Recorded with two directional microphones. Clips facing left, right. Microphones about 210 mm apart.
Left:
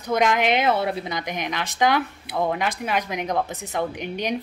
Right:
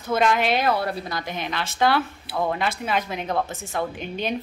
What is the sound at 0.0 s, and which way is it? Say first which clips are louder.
A woman's voice: even; 15° left (ahead or behind).